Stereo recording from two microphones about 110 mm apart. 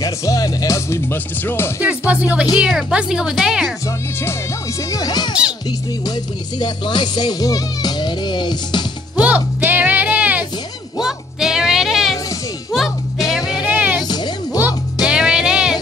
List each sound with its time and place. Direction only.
0.0 s music: 30° left (ahead or behind)
1.1 s speech: 20° left (ahead or behind)
1.8 s speech: 15° right (ahead or behind)
3.8 s speech: 25° left (ahead or behind)
4.9 s speech: 35° left (ahead or behind)
6.6 s speech: 40° left (ahead or behind)
9.2 s music: 15° right (ahead or behind)
13.6 s vehicle: 15° right (ahead or behind)
13.9 s music: 40° left (ahead or behind)
15.0 s music: 5° right (ahead or behind)